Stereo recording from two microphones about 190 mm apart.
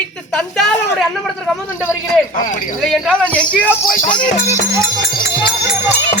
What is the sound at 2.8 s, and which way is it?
Speech, centre (ahead or behind).